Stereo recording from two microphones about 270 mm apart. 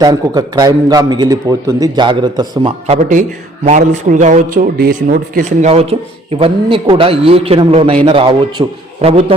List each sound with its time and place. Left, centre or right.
0.0 s a man's voice: centre